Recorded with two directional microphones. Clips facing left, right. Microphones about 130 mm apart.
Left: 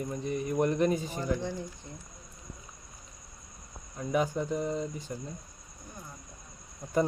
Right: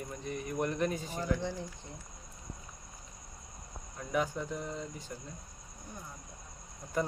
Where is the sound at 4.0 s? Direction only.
20° left (ahead or behind).